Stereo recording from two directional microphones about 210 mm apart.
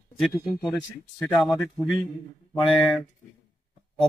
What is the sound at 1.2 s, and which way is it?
Speech, 5° left (ahead or behind).